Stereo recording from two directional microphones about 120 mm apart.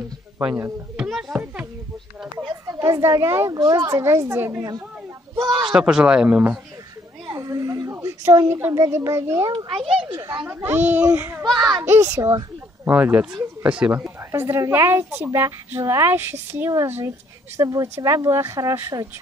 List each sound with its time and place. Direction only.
0.9 s a sound: 5° right (ahead or behind)
2.5 s a child's voice: 25° right (ahead or behind)
3.5 s a woman's voice: 30° right (ahead or behind)
4.6 s speech: 30° right (ahead or behind)
5.7 s a child's voice: 5° right (ahead or behind)
7.2 s a woman's voice: 30° right (ahead or behind)
9.7 s a child's voice: 50° right (ahead or behind)
10.4 s a woman's voice: 15° right (ahead or behind)
11.5 s speech: 35° right (ahead or behind)
11.8 s a child's voice: 25° right (ahead or behind)
14.3 s a woman's voice: 25° right (ahead or behind)